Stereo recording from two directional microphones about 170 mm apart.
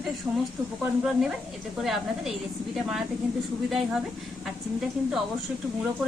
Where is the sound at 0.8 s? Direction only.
5° right (ahead or behind).